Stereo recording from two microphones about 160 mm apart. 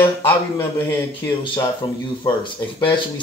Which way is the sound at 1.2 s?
30° left (ahead or behind).